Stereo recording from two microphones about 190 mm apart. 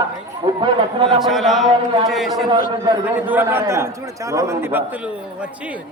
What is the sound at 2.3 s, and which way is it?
Speech, 20° right (ahead or behind).